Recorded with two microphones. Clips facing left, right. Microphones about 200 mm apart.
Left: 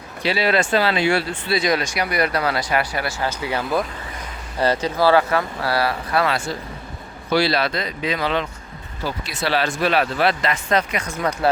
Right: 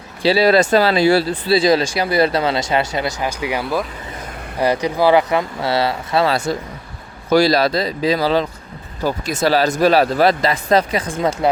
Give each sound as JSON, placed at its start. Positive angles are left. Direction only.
{"t": 0.2, "sound": "speech", "side_deg": -35}
{"t": 6.3, "sound": "speech", "side_deg": -40}